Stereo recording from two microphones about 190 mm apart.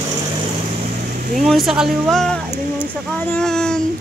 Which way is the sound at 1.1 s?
45° right (ahead or behind).